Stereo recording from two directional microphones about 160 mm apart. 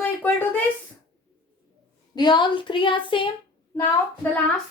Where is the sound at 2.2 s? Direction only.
30° left (ahead or behind).